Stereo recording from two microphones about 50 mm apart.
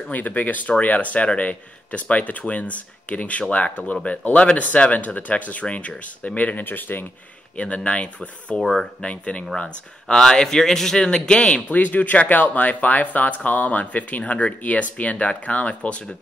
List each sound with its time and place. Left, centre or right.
0.1 s speech: left
7.5 s speech: left
8.5 s speech: centre
9.0 s speech: left
10.2 s speech: centre
11.1 s speech: left
11.6 s speech: left